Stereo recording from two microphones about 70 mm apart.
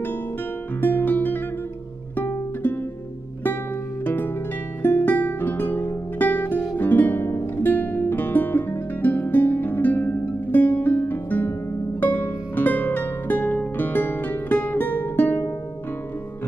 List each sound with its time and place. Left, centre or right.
0.7 s music: left
4.0 s music: left